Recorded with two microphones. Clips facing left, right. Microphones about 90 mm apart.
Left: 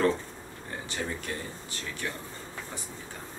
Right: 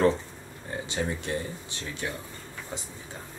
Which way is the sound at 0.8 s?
20° right (ahead or behind).